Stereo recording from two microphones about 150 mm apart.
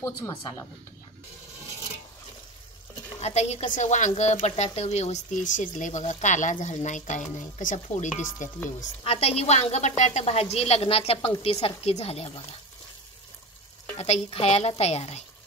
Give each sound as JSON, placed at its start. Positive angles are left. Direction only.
{"t": 0.0, "sound": "speech", "side_deg": 20}
{"t": 3.2, "sound": "a woman's voice", "side_deg": 45}
{"t": 9.0, "sound": "a woman's voice", "side_deg": 40}
{"t": 13.9, "sound": "a woman's voice", "side_deg": 45}